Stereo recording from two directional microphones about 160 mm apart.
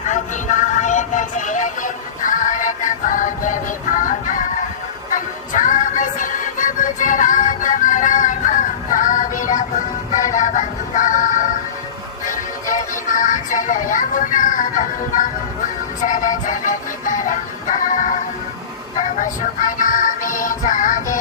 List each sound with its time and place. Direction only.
0.1 s music: 50° left (ahead or behind)